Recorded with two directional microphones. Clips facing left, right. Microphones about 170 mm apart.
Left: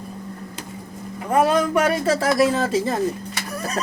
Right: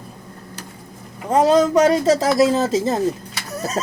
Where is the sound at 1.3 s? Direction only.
20° right (ahead or behind).